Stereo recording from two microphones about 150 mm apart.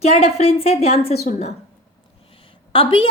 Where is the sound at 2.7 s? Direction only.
35° left (ahead or behind).